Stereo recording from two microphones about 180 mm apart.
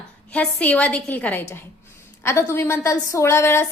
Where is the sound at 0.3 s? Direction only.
10° left (ahead or behind).